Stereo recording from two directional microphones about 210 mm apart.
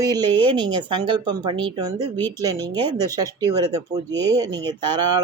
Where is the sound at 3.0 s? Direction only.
15° right (ahead or behind).